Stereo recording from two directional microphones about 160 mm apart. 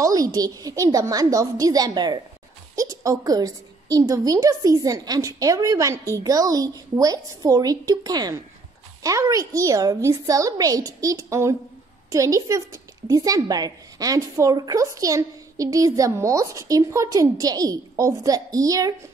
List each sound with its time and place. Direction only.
0.0 s speech: 20° right (ahead or behind)